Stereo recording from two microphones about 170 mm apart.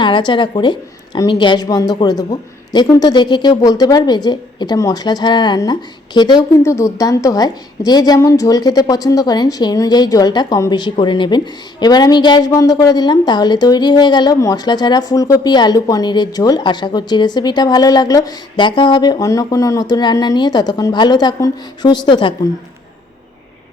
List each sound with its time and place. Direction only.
0.0 s speech: 25° left (ahead or behind)